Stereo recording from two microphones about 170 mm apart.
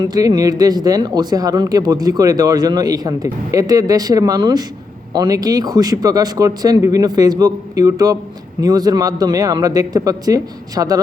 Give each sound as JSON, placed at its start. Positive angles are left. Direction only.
{"t": 0.0, "sound": "speech", "side_deg": -20}